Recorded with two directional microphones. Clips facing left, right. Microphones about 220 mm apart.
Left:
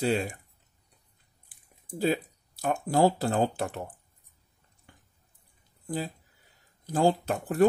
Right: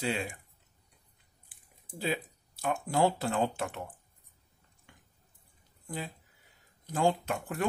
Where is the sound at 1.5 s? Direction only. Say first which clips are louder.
Even; 40° left (ahead or behind).